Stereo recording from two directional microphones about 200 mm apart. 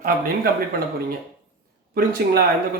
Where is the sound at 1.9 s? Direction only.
50° right (ahead or behind).